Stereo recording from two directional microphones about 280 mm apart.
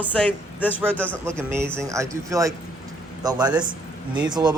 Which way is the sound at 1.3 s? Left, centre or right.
Centre.